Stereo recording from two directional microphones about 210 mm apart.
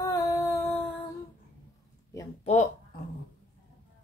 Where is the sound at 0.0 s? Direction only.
15° left (ahead or behind).